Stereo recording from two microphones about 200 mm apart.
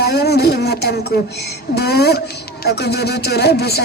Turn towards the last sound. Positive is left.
turn(degrees=55)  # may be behind; listen again after turning